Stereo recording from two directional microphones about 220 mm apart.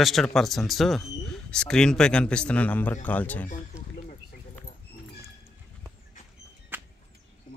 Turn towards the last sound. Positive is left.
turn(degrees=-10)  # may be behind; listen again after turning